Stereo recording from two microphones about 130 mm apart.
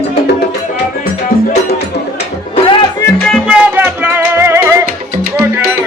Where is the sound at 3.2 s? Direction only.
Centre (ahead or behind).